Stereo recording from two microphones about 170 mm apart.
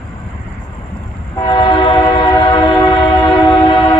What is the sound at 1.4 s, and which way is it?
Train, 25° left (ahead or behind).